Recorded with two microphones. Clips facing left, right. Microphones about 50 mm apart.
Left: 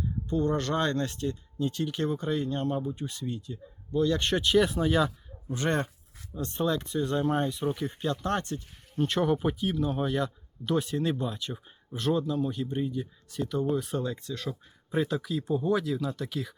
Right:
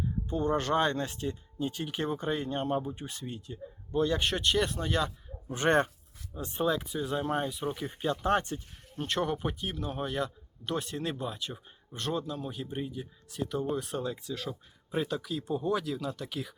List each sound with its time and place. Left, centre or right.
0.3 s speech: right
4.2 s speech: centre
5.5 s speech: right
6.3 s speech: centre
9.0 s speech: centre